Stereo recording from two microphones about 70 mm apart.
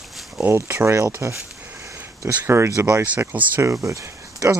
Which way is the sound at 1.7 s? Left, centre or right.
Right.